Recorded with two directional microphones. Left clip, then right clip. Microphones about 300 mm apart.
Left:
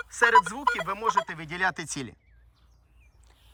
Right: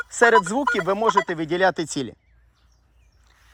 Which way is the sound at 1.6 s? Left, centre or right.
Centre.